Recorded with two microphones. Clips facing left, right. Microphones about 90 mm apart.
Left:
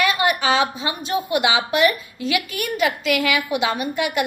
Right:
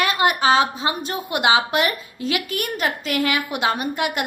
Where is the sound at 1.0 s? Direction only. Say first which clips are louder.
Left 3 dB; 50° right (ahead or behind).